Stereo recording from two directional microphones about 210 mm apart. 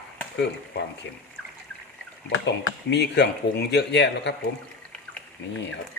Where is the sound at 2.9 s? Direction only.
55° left (ahead or behind).